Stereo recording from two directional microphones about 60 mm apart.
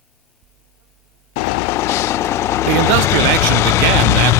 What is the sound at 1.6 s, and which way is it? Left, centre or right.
Vehicle, left.